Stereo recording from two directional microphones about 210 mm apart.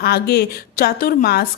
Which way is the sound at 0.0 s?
50° left (ahead or behind).